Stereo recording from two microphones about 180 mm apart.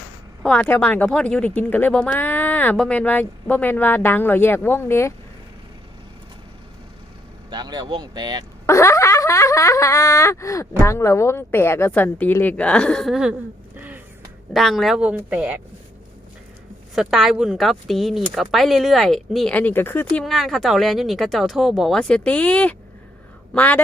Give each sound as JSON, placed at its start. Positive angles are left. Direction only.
{"t": 0.4, "sound": "speech", "side_deg": 5}
{"t": 7.5, "sound": "speech", "side_deg": -25}
{"t": 8.6, "sound": "speech", "side_deg": 15}
{"t": 14.5, "sound": "speech", "side_deg": 0}
{"t": 16.9, "sound": "speech", "side_deg": 0}